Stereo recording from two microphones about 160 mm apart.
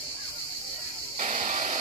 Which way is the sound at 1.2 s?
55° right (ahead or behind).